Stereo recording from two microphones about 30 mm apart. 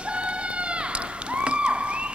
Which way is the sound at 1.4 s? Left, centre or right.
Right.